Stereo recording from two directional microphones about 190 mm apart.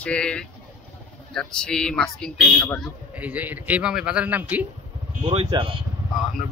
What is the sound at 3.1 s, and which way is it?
Speech, 10° right (ahead or behind).